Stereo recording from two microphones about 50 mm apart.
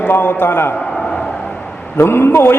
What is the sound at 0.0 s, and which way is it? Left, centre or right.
Mantra, left.